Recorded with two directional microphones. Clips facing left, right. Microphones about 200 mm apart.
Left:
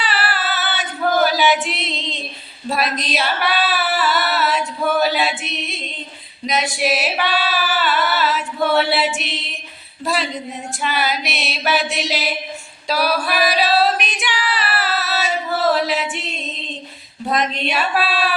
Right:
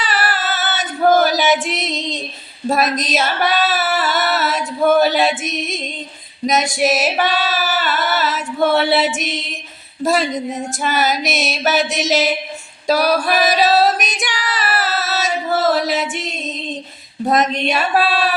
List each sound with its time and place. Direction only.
0.0 s choir: 45° right (ahead or behind)
2.6 s female singing: 45° right (ahead or behind)
6.4 s singing: 45° right (ahead or behind)
8.9 s a sound: 45° right (ahead or behind)
10.0 s speech: 45° right (ahead or behind)
10.8 s a sound: 45° right (ahead or behind)
12.9 s singing: 45° right (ahead or behind)
15.7 s a sound: 45° right (ahead or behind)
17.2 s speech: 45° right (ahead or behind)